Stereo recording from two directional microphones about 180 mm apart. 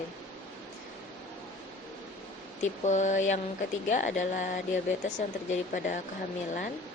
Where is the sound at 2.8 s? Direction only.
40° left (ahead or behind).